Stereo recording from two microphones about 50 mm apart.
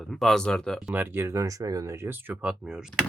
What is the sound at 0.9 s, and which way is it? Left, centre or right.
Speech, right.